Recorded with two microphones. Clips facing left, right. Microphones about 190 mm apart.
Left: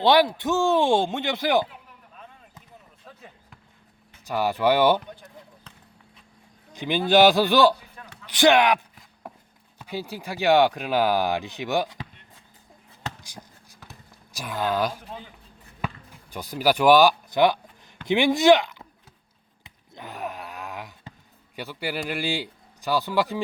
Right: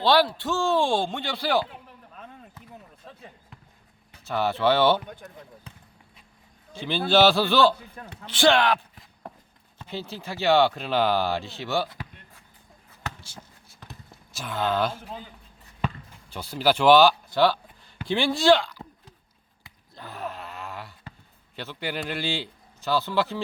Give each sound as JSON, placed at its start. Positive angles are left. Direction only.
{"t": 0.0, "sound": "speech", "side_deg": 20}
{"t": 3.1, "sound": "basketball bounce", "side_deg": 0}
{"t": 4.2, "sound": "speech", "side_deg": 15}
{"t": 5.0, "sound": "speech", "side_deg": -50}
{"t": 6.7, "sound": "speech", "side_deg": 15}
{"t": 8.0, "sound": "speech", "side_deg": -40}
{"t": 8.3, "sound": "speech", "side_deg": 15}
{"t": 14.3, "sound": "speech", "side_deg": 15}
{"t": 16.3, "sound": "speech", "side_deg": 15}
{"t": 19.6, "sound": "a sound", "side_deg": 20}
{"t": 21.5, "sound": "a man's voice", "side_deg": 10}